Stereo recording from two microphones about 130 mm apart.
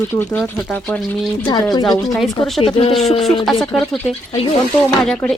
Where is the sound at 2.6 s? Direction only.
45° left (ahead or behind).